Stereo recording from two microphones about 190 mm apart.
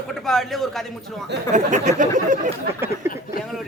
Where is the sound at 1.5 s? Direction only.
40° right (ahead or behind).